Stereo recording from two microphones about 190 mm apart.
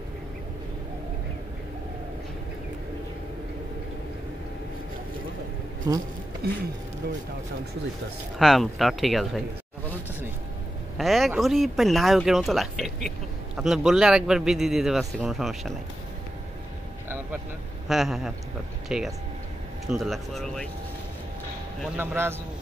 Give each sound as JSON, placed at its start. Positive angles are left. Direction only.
{"t": 5.9, "sound": "speech", "side_deg": -20}
{"t": 6.4, "sound": "speech", "side_deg": -55}
{"t": 8.4, "sound": "speech", "side_deg": 0}
{"t": 11.0, "sound": "speech", "side_deg": 0}
{"t": 17.8, "sound": "speech", "side_deg": 0}
{"t": 21.9, "sound": "a man's voice", "side_deg": -10}